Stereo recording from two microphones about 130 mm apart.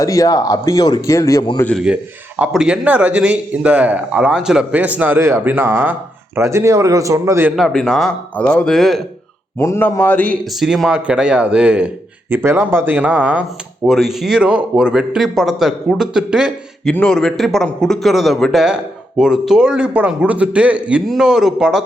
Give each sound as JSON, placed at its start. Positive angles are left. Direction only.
{"t": 0.0, "sound": "speech", "side_deg": 25}
{"t": 1.8, "sound": "a man's voice", "side_deg": -10}
{"t": 7.5, "sound": "a man's voice", "side_deg": 0}
{"t": 9.6, "sound": "a man's voice", "side_deg": 20}
{"t": 10.6, "sound": "a man's voice", "side_deg": 0}
{"t": 13.8, "sound": "a man's voice", "side_deg": 0}
{"t": 16.8, "sound": "a man's voice", "side_deg": 5}